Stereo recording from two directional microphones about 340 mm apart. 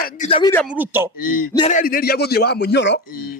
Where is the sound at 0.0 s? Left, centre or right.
Centre.